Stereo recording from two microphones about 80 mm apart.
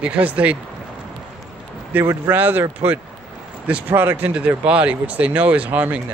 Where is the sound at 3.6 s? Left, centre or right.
Right.